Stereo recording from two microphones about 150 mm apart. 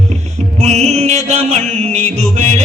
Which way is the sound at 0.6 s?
50° right (ahead or behind).